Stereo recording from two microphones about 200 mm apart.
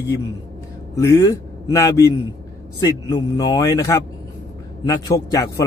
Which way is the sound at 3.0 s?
20° left (ahead or behind).